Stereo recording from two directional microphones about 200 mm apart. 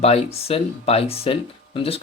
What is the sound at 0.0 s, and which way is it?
Speech, 30° left (ahead or behind).